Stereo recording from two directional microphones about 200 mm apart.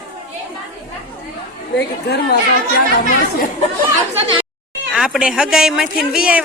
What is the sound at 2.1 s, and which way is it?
Speech, 50° left (ahead or behind).